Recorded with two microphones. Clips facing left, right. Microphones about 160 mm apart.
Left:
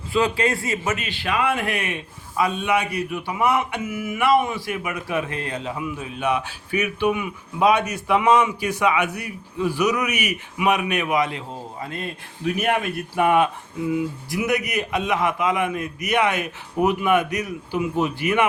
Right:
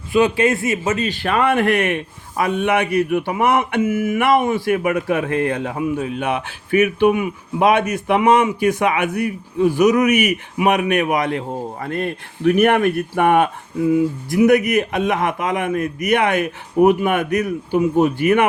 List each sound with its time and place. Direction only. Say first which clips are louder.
0.1 s a man's voice: right 5 dB; 20° right (ahead or behind)
0.9 s a sound: right 5 dB; 40° right (ahead or behind); by 13.5 s 55° right (ahead or behind)
13.9 s speech: right 7 dB; 45° right (ahead or behind)